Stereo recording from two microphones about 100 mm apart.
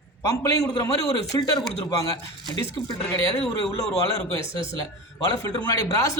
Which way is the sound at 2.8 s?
40° left (ahead or behind).